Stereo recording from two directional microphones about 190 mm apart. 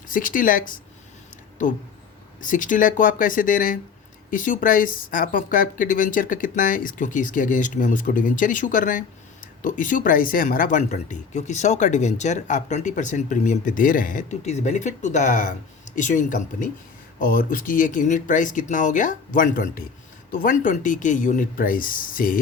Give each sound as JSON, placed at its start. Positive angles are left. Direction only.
{"t": 0.1, "sound": "speech", "side_deg": 45}
{"t": 2.4, "sound": "speech", "side_deg": 45}